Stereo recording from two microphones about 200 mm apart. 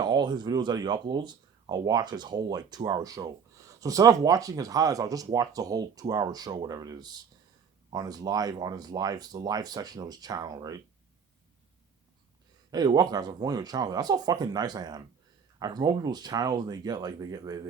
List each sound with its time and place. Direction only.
0.0 s speech: 20° right (ahead or behind)
12.7 s speech: 20° right (ahead or behind)